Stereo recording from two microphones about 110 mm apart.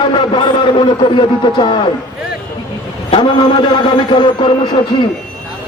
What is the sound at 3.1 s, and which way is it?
A man's voice, 45° left (ahead or behind).